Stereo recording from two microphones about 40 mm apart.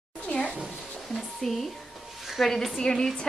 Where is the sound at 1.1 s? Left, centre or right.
Centre.